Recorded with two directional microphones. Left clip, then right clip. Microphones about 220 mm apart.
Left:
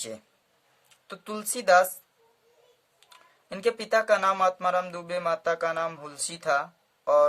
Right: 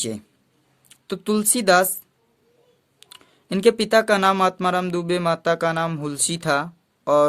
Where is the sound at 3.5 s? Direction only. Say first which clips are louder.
Right 8 dB; 45° right (ahead or behind).